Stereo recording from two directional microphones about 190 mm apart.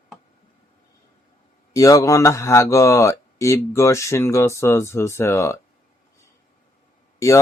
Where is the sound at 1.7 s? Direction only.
15° left (ahead or behind).